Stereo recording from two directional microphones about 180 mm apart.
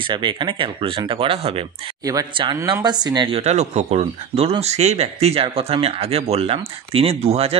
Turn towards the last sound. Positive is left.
turn(degrees=-35)  # may be behind; listen again after turning